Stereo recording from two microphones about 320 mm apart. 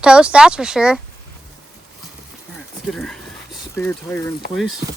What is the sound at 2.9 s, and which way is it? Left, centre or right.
Speech, centre.